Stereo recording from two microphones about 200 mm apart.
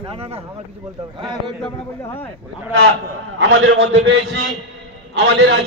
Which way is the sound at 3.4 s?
65° right (ahead or behind).